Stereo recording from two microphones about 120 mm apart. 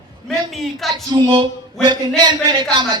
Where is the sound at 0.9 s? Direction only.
40° right (ahead or behind).